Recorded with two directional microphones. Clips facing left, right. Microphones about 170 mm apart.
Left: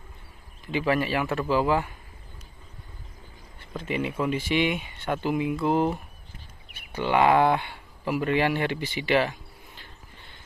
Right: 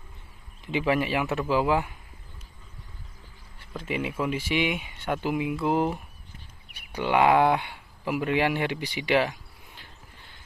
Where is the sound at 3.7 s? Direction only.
5° right (ahead or behind).